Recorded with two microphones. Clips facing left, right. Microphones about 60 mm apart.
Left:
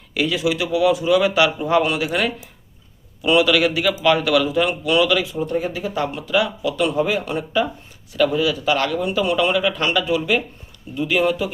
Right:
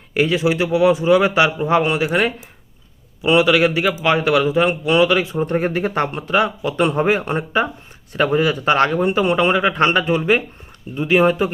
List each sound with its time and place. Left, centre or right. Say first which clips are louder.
0.1 s a man's voice: right 3 dB; right